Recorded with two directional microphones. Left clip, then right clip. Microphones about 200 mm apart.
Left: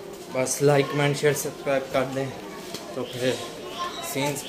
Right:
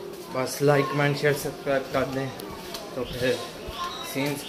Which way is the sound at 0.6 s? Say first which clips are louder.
Even; 10° left (ahead or behind).